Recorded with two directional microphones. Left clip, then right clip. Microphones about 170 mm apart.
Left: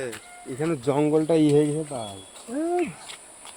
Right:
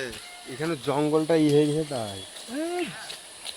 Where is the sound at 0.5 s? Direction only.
70° left (ahead or behind).